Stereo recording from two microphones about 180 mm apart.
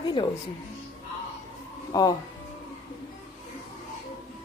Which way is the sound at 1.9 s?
20° left (ahead or behind).